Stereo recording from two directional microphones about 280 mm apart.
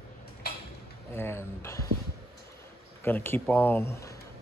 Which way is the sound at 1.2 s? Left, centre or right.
Centre.